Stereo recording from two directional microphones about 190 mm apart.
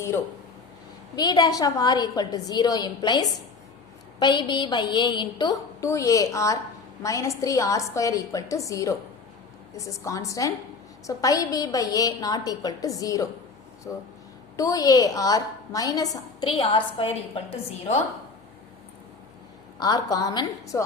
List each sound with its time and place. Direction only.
1.1 s a woman's voice: 20° left (ahead or behind)
19.8 s a woman's voice: 20° left (ahead or behind)